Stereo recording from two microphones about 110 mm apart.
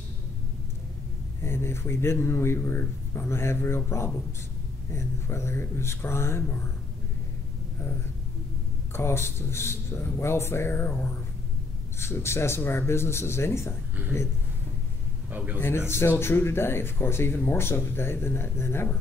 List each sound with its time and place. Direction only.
1.4 s speech: 25° left (ahead or behind)
8.9 s speech: 25° left (ahead or behind)
15.2 s a man's voice: 15° right (ahead or behind)
15.9 s speech: 20° left (ahead or behind)